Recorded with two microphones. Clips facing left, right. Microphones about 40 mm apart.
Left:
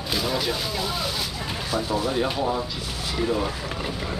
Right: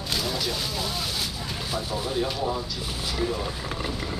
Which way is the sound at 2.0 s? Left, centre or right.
Centre.